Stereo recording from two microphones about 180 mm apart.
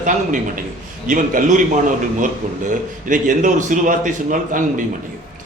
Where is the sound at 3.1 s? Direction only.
45° right (ahead or behind).